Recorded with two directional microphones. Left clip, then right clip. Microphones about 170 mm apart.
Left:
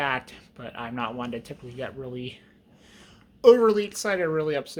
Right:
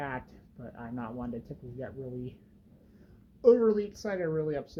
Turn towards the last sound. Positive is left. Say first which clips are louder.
# left 6 dB
turn(degrees=25)  # may be behind; listen again after turning